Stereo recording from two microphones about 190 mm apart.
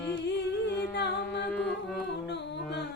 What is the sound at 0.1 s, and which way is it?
A capella, 65° left (ahead or behind).